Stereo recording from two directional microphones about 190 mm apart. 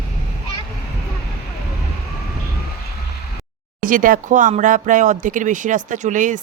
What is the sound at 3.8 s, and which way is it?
Speech, 45° right (ahead or behind).